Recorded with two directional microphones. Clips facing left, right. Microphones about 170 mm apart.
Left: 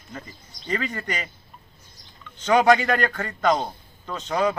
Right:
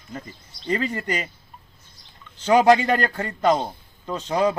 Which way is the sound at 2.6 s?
30° right (ahead or behind).